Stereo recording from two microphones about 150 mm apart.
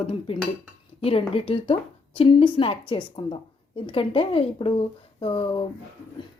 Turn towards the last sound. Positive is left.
turn(degrees=35)  # may be behind; listen again after turning